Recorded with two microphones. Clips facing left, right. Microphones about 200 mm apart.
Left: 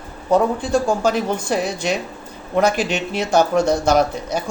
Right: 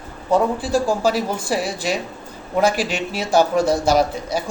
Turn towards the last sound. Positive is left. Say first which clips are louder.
# left 1 dB
turn(degrees=-5)  # may be behind; listen again after turning